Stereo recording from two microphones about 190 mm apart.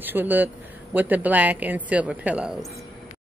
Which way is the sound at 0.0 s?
10° right (ahead or behind).